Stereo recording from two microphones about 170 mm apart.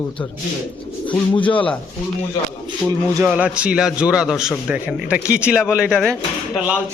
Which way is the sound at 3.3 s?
5° right (ahead or behind).